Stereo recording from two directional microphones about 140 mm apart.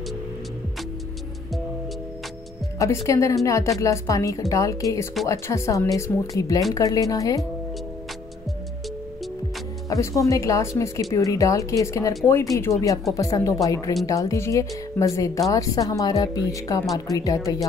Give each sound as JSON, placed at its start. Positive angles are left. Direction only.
{"t": 2.8, "sound": "speech", "side_deg": 20}
{"t": 9.8, "sound": "speech", "side_deg": 25}